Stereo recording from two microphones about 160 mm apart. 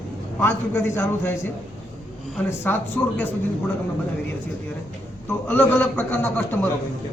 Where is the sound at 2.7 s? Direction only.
10° left (ahead or behind).